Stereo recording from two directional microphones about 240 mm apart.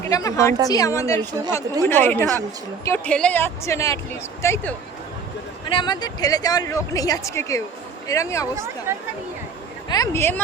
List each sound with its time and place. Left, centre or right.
0.1 s speech: centre
8.9 s speech: centre
9.9 s speech: centre